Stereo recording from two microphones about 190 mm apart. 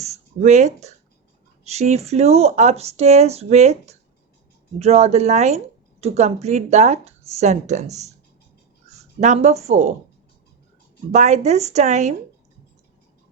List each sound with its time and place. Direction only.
0.0 s a sound: 35° right (ahead or behind)
1.6 s speech: 35° right (ahead or behind)
11.1 s speech: 35° right (ahead or behind)